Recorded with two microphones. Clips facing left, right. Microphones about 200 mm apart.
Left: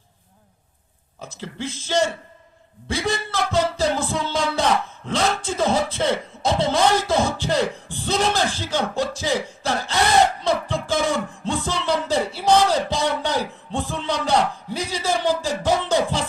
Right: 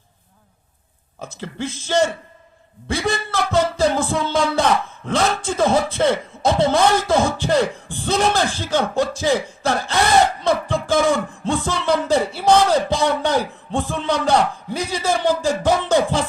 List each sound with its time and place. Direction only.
1.2 s speech: 55° right (ahead or behind)
2.8 s music: 55° right (ahead or behind)
5.0 s speech: 55° right (ahead or behind)
10.4 s music: 55° right (ahead or behind)
11.4 s speech: 55° right (ahead or behind)